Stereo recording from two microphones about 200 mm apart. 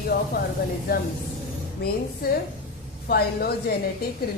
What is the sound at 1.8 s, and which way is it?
Speech, 50° left (ahead or behind).